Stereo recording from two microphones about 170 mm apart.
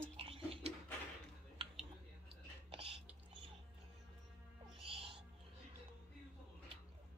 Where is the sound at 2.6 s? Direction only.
35° right (ahead or behind).